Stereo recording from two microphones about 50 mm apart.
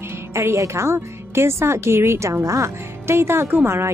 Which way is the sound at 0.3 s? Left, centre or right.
Right.